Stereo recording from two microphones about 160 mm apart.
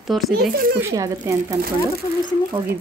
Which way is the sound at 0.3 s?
75° right (ahead or behind).